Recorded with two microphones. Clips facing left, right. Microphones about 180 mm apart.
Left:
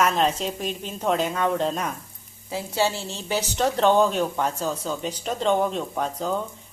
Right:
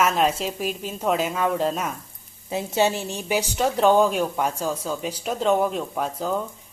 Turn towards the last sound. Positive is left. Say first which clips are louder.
# right 1 dB
turn(degrees=-5)  # may be behind; listen again after turning